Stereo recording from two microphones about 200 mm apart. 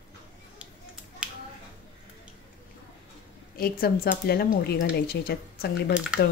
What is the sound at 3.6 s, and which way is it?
Speech, 50° left (ahead or behind).